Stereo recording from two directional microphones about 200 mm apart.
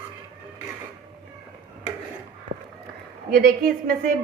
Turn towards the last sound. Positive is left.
turn(degrees=-45)  # may be behind; listen again after turning